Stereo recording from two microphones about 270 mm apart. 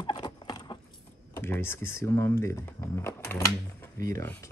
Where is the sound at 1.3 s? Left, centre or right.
Centre.